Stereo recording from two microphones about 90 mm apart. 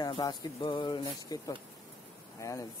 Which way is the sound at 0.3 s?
55° left (ahead or behind).